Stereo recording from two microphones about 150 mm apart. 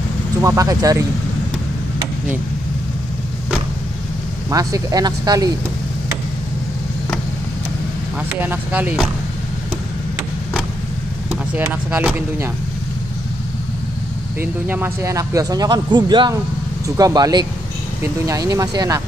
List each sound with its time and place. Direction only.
0.4 s speech: 20° right (ahead or behind)
4.5 s speech: 25° right (ahead or behind)
8.4 s speech: 10° right (ahead or behind)
11.5 s speech: 10° right (ahead or behind)
14.4 s speech: 15° right (ahead or behind)